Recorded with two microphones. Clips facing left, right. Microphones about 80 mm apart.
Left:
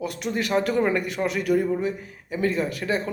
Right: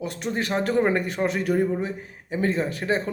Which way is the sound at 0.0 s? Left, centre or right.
Right.